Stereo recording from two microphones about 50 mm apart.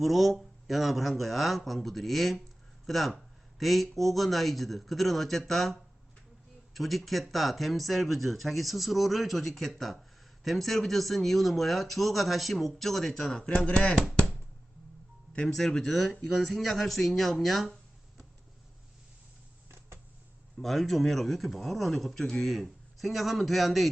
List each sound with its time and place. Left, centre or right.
0.0 s speech: centre
15.3 s speech: centre
15.5 s speech: centre
20.6 s speech: centre